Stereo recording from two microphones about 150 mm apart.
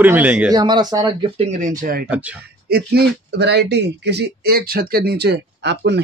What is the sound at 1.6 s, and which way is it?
Speech, 60° right (ahead or behind).